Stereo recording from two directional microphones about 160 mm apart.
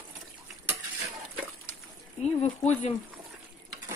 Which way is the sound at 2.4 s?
40° left (ahead or behind).